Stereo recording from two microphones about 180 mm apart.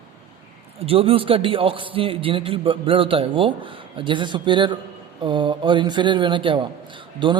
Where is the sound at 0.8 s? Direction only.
30° right (ahead or behind).